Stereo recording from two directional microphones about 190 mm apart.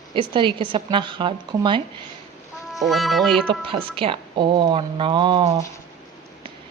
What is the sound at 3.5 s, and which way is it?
A woman's voice, 30° right (ahead or behind).